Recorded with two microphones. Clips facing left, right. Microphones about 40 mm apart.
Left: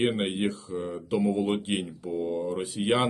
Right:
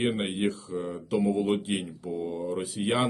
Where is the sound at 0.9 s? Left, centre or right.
Left.